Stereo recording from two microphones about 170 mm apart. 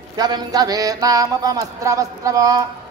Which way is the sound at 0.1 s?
25° right (ahead or behind).